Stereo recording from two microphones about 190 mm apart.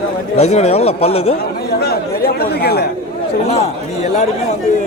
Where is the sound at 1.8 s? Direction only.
55° left (ahead or behind).